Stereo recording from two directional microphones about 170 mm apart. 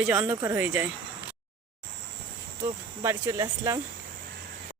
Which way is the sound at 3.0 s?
15° right (ahead or behind).